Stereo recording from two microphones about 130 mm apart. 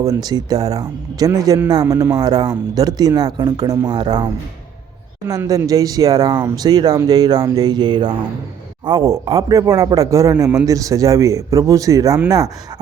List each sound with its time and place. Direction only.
0.0 s speech: 30° right (ahead or behind)
5.3 s speech: 25° right (ahead or behind)